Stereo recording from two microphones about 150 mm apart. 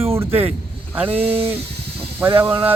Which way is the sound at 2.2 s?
15° right (ahead or behind).